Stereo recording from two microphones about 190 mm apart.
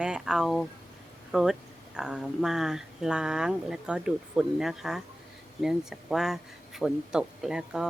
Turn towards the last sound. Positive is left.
turn(degrees=-5)  # may be behind; listen again after turning